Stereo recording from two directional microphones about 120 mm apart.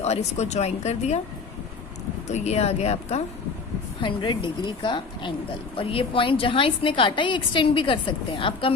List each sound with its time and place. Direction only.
0.0 s speech: 65° left (ahead or behind)
2.2 s speech: 70° left (ahead or behind)
4.0 s speech: 40° left (ahead or behind)